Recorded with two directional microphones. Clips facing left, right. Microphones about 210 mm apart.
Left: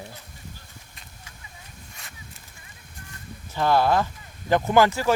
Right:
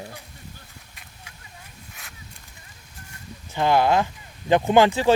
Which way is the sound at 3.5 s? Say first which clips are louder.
Right 1 dB; 20° right (ahead or behind).